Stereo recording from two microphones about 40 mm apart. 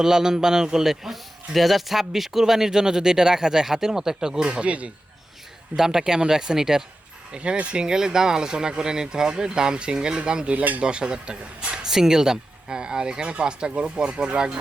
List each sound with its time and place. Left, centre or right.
0.0 s a man's voice: centre
5.7 s a man's voice: centre
7.3 s a man's voice: right